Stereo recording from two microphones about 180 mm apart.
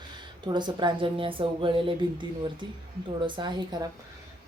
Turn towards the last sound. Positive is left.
turn(degrees=-25)  # may be behind; listen again after turning